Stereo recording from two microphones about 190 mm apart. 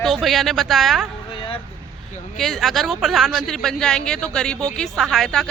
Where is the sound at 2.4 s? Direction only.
Centre (ahead or behind).